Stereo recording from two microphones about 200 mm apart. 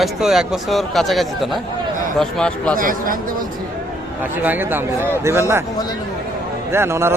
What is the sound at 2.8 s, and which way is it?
Speech, 45° right (ahead or behind).